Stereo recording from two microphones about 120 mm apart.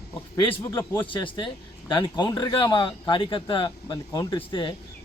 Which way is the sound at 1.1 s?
40° left (ahead or behind).